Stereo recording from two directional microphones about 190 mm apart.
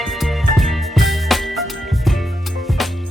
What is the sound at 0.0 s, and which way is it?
Music, centre (ahead or behind).